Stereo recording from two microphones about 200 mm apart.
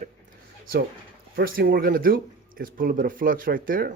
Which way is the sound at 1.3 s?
50° right (ahead or behind).